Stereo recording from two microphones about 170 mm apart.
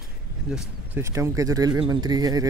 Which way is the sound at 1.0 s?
15° right (ahead or behind).